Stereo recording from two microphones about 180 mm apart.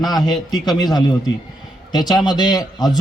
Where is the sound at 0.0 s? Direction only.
20° left (ahead or behind).